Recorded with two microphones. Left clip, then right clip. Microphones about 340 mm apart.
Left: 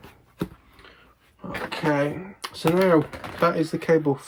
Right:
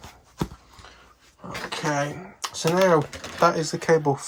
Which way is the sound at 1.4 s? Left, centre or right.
Centre.